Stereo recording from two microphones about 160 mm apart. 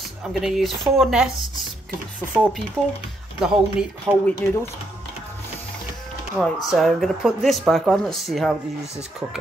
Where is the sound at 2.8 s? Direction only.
15° right (ahead or behind).